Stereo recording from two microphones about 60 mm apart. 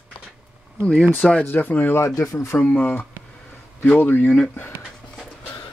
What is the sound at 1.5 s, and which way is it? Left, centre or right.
Speech, left.